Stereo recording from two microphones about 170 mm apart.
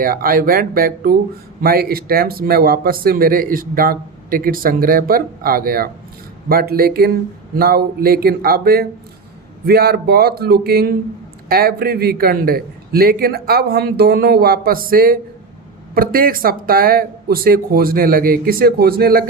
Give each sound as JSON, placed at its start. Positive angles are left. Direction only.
{"t": 0.0, "sound": "speech", "side_deg": -60}